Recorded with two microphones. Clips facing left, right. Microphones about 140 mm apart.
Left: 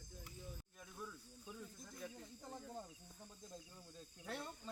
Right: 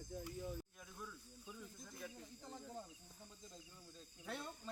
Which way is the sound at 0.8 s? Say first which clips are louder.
Left 1 dB; 5° left (ahead or behind).